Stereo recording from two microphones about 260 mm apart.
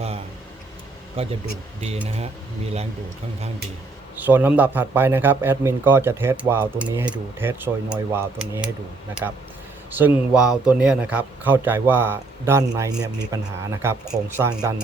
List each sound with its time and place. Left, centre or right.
1.2 s speech: right
4.2 s a man's voice: centre
9.9 s a man's voice: centre